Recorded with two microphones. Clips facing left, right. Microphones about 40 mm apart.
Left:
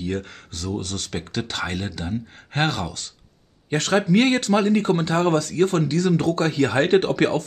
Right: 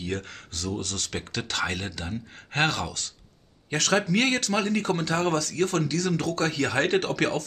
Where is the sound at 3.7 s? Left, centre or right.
Left.